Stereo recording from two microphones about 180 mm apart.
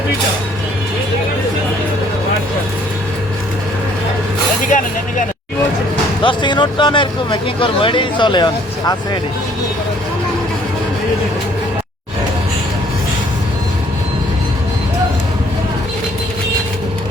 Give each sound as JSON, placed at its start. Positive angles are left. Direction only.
{"t": 4.7, "sound": "vehicle", "side_deg": 45}
{"t": 6.2, "sound": "speech", "side_deg": 25}